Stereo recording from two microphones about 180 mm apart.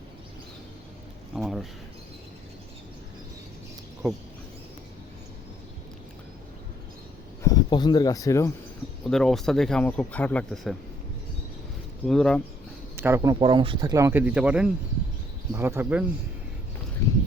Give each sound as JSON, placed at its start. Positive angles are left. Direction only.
{"t": 1.4, "sound": "speech", "side_deg": 0}
{"t": 7.4, "sound": "speech", "side_deg": 20}
{"t": 9.0, "sound": "speech", "side_deg": 5}
{"t": 12.0, "sound": "speech", "side_deg": 5}
{"t": 13.0, "sound": "speech", "side_deg": -15}
{"t": 13.4, "sound": "speech", "side_deg": -30}
{"t": 13.9, "sound": "speech", "side_deg": -15}